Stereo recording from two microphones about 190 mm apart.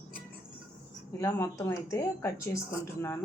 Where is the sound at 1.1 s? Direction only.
15° left (ahead or behind).